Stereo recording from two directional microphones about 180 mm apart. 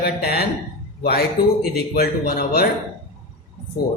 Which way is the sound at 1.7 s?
60° left (ahead or behind).